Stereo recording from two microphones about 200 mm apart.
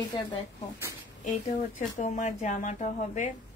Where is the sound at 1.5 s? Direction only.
35° left (ahead or behind).